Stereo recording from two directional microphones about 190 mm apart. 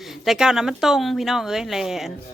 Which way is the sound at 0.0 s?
Centre (ahead or behind).